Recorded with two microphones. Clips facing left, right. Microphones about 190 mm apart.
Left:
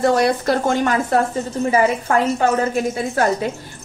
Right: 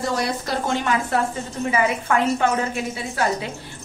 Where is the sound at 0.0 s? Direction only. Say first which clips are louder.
Left 8 dB; 60° left (ahead or behind).